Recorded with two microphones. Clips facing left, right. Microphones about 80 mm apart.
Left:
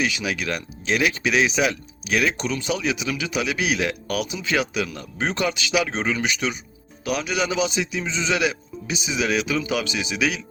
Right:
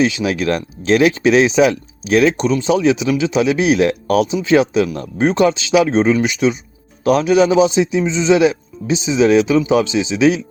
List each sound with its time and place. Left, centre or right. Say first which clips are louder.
0.0 s a man's voice: right 9 dB; right
7.0 s a man's voice: right 12 dB; right